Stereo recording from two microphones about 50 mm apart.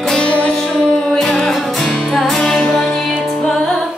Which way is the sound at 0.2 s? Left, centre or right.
Left.